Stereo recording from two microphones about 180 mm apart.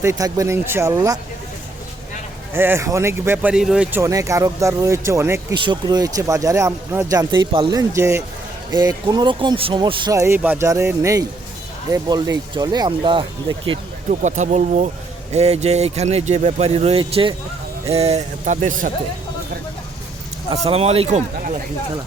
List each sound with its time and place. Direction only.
0.0 s speech: 15° right (ahead or behind)
2.5 s speech: 15° right (ahead or behind)
4.0 s speech: 20° right (ahead or behind)
5.5 s speech: 25° right (ahead or behind)
14.1 s speech: 45° right (ahead or behind)
20.5 s speech: 35° right (ahead or behind)